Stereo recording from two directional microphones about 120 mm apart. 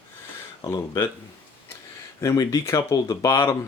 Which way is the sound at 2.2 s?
25° left (ahead or behind).